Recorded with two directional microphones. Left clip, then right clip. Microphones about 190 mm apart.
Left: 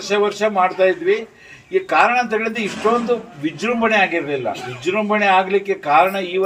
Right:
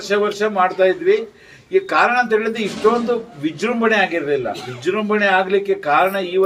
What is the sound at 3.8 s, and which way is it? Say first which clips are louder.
A man's voice: even; centre (ahead or behind).